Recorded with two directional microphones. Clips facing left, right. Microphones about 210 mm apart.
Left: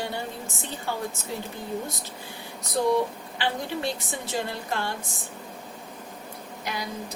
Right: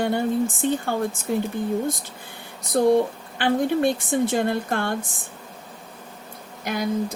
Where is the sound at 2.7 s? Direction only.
55° right (ahead or behind).